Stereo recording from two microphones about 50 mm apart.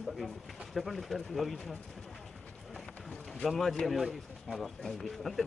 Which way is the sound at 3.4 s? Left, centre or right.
Centre.